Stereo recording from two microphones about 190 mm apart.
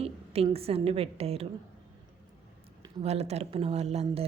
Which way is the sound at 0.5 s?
30° right (ahead or behind).